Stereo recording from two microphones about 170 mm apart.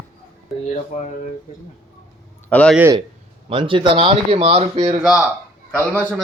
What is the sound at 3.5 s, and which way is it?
Speech, 30° right (ahead or behind).